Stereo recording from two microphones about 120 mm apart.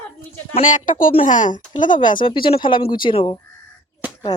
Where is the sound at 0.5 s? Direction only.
90° left.